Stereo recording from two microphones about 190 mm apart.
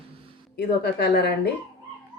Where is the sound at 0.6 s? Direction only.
55° left (ahead or behind).